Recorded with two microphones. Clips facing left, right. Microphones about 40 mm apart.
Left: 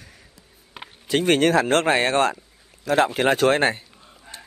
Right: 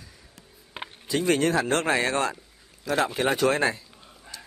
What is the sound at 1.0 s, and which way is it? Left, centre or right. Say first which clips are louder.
Speech: left 5 dB; left.